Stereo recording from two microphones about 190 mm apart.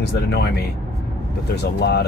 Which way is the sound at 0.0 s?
55° left (ahead or behind).